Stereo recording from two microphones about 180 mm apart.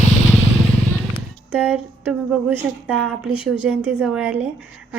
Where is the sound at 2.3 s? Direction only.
10° right (ahead or behind).